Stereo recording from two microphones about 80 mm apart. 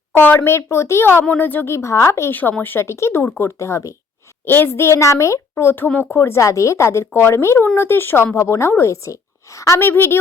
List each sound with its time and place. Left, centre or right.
0.1 s a woman's voice: left
1.7 s a woman's voice: left
2.3 s a woman's voice: left